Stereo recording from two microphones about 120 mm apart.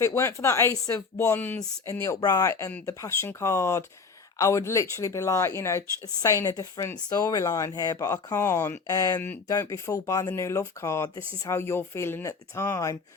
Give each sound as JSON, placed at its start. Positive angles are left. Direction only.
{"t": 0.0, "sound": "speech", "side_deg": 20}
{"t": 1.9, "sound": "speech", "side_deg": 25}